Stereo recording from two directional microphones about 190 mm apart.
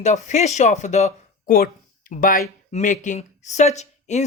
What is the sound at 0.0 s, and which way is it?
Speech, 35° left (ahead or behind).